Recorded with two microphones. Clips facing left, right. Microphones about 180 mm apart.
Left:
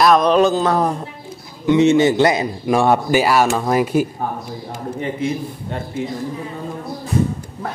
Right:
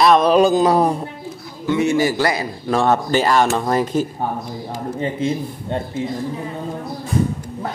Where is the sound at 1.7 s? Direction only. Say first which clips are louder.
Left 4 dB; 20° left (ahead or behind).